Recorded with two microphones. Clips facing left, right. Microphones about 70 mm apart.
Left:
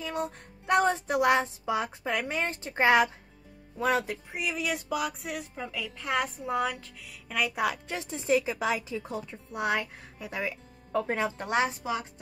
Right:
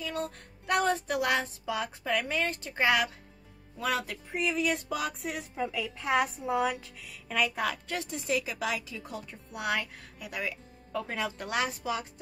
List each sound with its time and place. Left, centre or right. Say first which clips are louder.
0.0 s speech: left 2 dB; left
4.3 s a sound: right 6 dB; centre
5.7 s speech: right 1 dB; centre; by 12.1 s left